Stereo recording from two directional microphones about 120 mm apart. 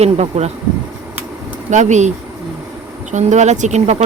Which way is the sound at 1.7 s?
80° right.